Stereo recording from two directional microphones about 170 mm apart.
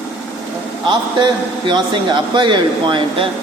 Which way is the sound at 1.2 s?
25° right (ahead or behind).